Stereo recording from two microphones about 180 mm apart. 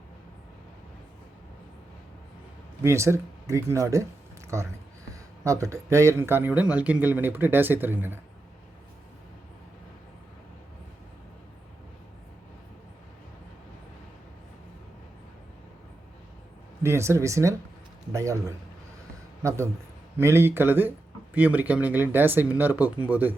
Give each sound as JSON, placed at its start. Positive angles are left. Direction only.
{"t": 2.8, "sound": "a man's voice", "side_deg": -15}
{"t": 5.4, "sound": "a man's voice", "side_deg": -15}
{"t": 16.8, "sound": "a man's voice", "side_deg": -15}